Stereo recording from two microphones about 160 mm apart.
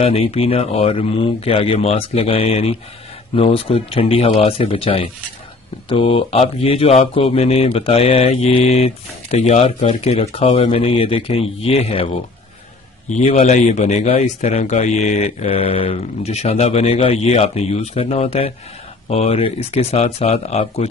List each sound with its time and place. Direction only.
0.0 s speech: 40° left (ahead or behind)
13.1 s speech: 45° left (ahead or behind)